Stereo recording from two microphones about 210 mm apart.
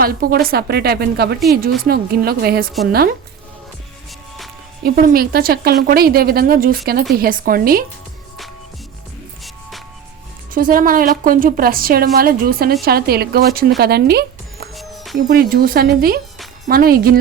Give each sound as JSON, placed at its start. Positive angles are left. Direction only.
{"t": 0.0, "sound": "speech", "side_deg": -45}
{"t": 4.8, "sound": "speech", "side_deg": -45}
{"t": 9.4, "sound": "music", "side_deg": 0}
{"t": 10.5, "sound": "speech", "side_deg": -40}
{"t": 14.8, "sound": "music", "side_deg": 0}
{"t": 15.3, "sound": "speech", "side_deg": -45}